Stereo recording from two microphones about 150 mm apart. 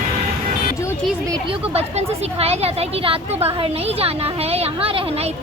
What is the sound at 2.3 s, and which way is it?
A woman's voice, 45° right (ahead or behind).